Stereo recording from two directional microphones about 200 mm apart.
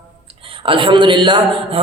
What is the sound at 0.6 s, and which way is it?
A man's voice, 25° right (ahead or behind).